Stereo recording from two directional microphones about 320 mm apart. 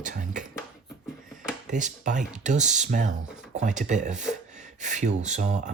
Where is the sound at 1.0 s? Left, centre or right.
Centre.